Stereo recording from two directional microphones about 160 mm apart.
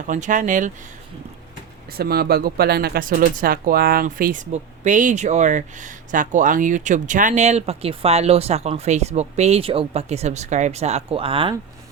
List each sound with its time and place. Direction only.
0.0 s speech: 50° right (ahead or behind)
1.9 s speech: 75° right (ahead or behind); by 11.5 s 35° right (ahead or behind)